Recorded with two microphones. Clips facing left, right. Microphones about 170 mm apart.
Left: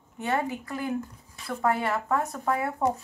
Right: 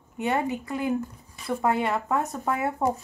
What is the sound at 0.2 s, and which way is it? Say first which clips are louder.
Speech: right 2 dB; 20° right (ahead or behind).